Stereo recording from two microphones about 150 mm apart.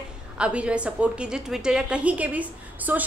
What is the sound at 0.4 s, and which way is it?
A woman's voice, 10° right (ahead or behind).